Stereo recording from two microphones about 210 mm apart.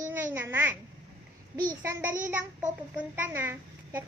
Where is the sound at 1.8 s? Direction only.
10° right (ahead or behind).